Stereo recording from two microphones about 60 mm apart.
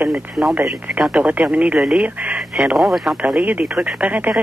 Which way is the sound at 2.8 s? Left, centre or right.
Centre.